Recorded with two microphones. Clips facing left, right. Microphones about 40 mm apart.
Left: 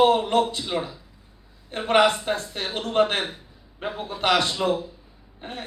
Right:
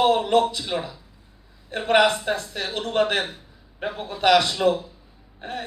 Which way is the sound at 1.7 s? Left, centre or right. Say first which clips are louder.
Right 1 dB; left.